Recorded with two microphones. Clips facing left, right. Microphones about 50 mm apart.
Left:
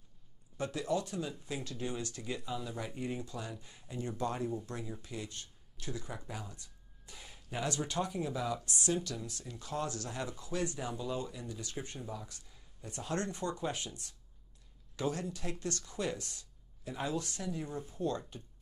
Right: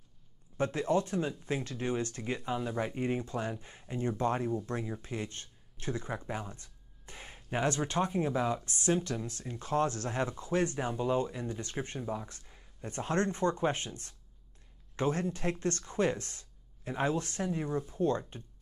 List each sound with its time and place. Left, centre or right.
0.6 s speech: right